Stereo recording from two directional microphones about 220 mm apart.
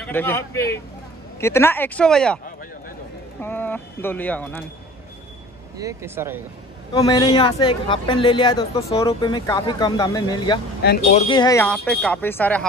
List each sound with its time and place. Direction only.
0.0 s speech: 10° left (ahead or behind)
5.8 s speech: 15° right (ahead or behind)
6.9 s speech: 20° left (ahead or behind)